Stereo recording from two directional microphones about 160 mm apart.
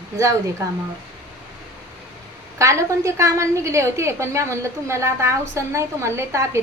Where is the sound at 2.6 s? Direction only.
20° right (ahead or behind).